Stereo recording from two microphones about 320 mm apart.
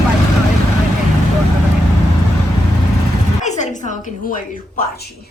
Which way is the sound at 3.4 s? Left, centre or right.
Left.